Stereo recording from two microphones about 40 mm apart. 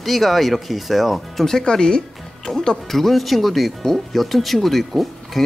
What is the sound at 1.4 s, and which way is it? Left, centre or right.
Speech, centre.